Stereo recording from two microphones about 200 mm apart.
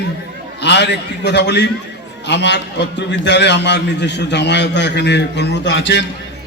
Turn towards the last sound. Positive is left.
turn(degrees=60)  # may be behind; listen again after turning